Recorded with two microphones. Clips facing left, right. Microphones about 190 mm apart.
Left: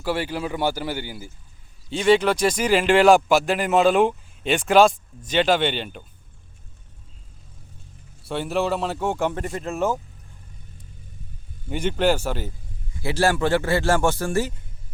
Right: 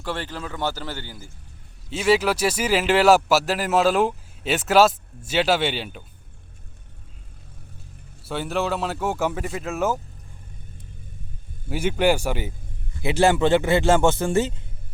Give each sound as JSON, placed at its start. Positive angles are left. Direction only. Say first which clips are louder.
{"t": 0.0, "sound": "a man's voice", "louder": "left 5 dB", "side_deg": 10}
{"t": 1.9, "sound": "a man's voice", "louder": "left 2 dB", "side_deg": -5}
{"t": 8.2, "sound": "a man's voice", "louder": "left 2 dB", "side_deg": 0}
{"t": 11.7, "sound": "speech", "louder": "right 1 dB", "side_deg": -10}